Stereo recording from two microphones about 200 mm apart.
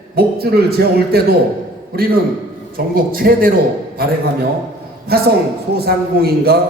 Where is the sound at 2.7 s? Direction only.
45° right (ahead or behind).